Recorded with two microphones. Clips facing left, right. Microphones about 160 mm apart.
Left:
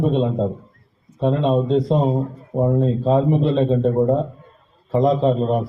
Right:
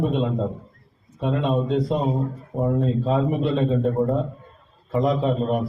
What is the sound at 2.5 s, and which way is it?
A man's voice, 25° left (ahead or behind).